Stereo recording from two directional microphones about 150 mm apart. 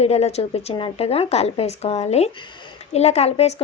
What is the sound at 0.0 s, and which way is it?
Speech, 45° left (ahead or behind).